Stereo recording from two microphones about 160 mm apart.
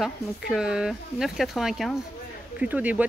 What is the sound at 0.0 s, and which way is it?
Speech, 5° right (ahead or behind).